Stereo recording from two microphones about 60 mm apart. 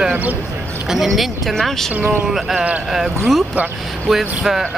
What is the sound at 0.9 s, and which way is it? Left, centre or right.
Speech, centre.